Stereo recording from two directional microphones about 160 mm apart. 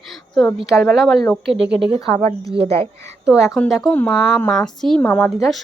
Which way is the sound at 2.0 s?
45° right (ahead or behind).